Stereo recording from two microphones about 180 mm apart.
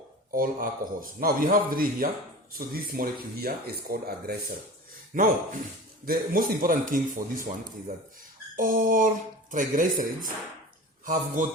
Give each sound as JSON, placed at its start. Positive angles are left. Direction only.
{"t": 0.3, "sound": "speech", "side_deg": -50}
{"t": 5.1, "sound": "speech", "side_deg": -50}
{"t": 8.5, "sound": "a man's voice", "side_deg": -50}